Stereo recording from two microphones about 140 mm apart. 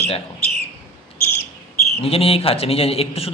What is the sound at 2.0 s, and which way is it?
Speech, 45° left (ahead or behind).